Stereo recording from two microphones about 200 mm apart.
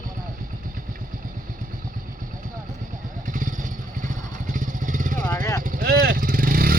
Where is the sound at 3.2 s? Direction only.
40° right (ahead or behind).